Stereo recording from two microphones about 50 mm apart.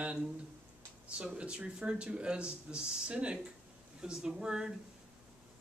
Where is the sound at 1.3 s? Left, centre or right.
Right.